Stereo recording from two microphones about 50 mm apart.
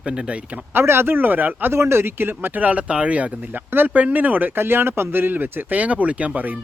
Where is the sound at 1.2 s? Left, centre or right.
Right.